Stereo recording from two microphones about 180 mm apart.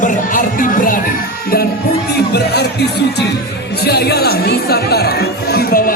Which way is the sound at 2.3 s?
65° left (ahead or behind).